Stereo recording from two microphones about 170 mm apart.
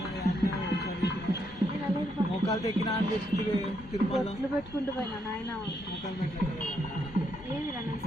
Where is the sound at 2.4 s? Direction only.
20° left (ahead or behind).